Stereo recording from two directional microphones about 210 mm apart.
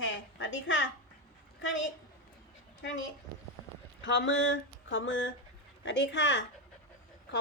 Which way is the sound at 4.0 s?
60° left (ahead or behind).